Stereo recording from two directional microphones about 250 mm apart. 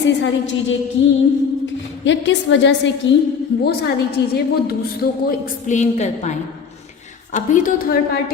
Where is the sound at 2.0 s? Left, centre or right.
Left.